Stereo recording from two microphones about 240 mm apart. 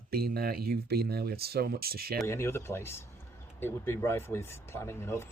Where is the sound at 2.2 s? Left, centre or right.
Centre.